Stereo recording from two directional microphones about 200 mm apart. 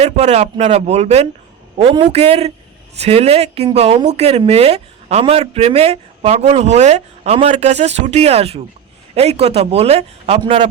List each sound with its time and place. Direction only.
0.0 s speech: 30° right (ahead or behind)